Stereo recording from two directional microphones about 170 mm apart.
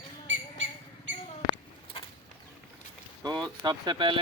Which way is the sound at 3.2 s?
25° right (ahead or behind).